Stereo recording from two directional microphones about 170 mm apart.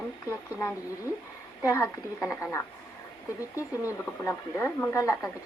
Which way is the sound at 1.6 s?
15° left (ahead or behind).